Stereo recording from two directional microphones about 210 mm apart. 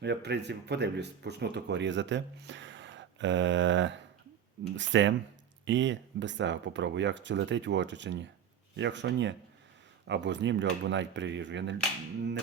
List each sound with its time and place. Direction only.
0.0 s speech: 55° right (ahead or behind)